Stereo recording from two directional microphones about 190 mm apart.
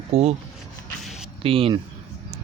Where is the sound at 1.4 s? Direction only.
30° right (ahead or behind).